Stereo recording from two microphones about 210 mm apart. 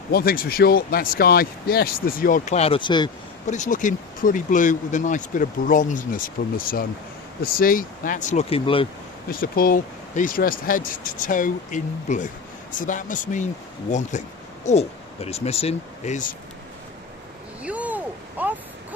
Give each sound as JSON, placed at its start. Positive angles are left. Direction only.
{"t": 0.1, "sound": "speech", "side_deg": 45}
{"t": 3.4, "sound": "speech", "side_deg": 35}
{"t": 9.3, "sound": "speech", "side_deg": 45}
{"t": 17.6, "sound": "a sound", "side_deg": -5}